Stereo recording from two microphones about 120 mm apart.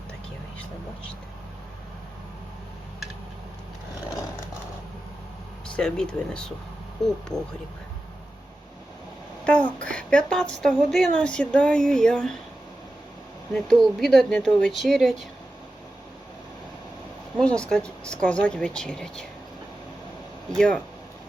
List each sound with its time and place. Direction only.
5.6 s a woman's voice: 5° left (ahead or behind)
9.4 s a woman's voice: 10° left (ahead or behind)
13.5 s speech: 5° left (ahead or behind)
17.4 s a woman's voice: 5° left (ahead or behind)
20.6 s a woman's voice: 10° left (ahead or behind)